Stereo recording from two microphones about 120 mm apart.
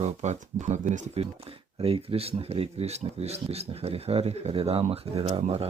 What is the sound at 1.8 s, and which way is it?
Speech, 50° right (ahead or behind).